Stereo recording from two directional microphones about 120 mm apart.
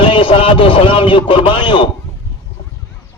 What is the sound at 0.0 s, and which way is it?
Speech, 45° left (ahead or behind).